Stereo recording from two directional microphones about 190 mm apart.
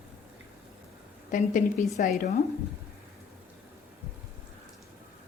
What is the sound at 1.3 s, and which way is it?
Speech, 40° left (ahead or behind).